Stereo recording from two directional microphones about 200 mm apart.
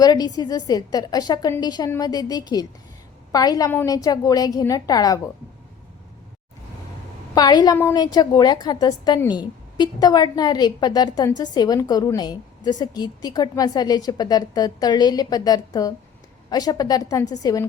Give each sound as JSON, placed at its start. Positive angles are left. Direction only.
{"t": 0.0, "sound": "a woman's voice", "side_deg": 20}
{"t": 7.3, "sound": "a woman's voice", "side_deg": 20}